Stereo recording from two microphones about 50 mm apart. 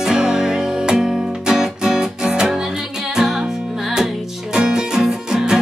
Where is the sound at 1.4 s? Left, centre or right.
Centre.